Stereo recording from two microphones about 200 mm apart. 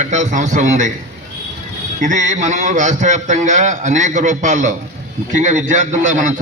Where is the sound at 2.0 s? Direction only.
40° right (ahead or behind).